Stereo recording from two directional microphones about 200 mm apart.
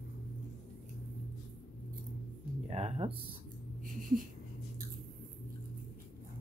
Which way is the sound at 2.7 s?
30° right (ahead or behind).